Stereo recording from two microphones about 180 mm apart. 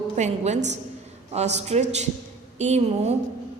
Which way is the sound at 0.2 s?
40° right (ahead or behind).